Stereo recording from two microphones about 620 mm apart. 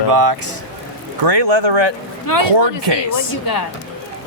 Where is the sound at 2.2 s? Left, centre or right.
Left.